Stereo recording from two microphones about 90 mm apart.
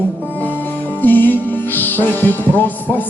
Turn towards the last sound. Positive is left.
turn(degrees=20)  # may be behind; listen again after turning